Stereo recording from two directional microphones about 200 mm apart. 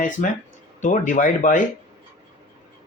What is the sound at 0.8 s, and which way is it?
Speech, 40° left (ahead or behind).